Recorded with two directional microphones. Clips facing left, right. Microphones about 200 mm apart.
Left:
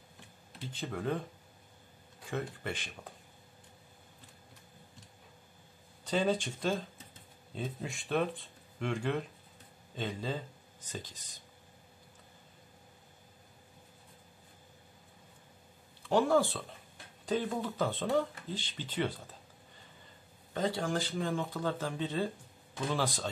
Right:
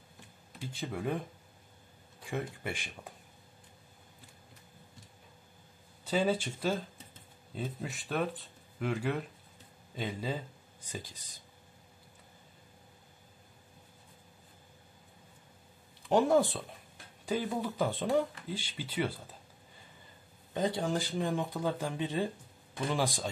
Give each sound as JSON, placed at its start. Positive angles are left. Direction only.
{"t": 0.7, "sound": "speech", "side_deg": -10}
{"t": 2.3, "sound": "speech", "side_deg": -10}
{"t": 6.0, "sound": "speech", "side_deg": -5}
{"t": 16.1, "sound": "speech", "side_deg": -20}
{"t": 20.5, "sound": "speech", "side_deg": -15}